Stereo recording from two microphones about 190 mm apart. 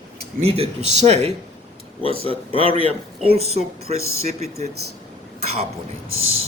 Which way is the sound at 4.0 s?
90° right.